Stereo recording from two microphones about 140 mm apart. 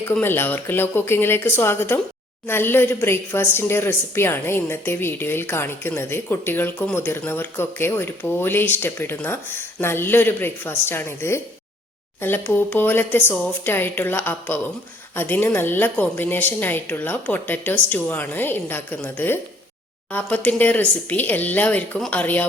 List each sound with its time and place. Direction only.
0.0 s speech: 15° left (ahead or behind)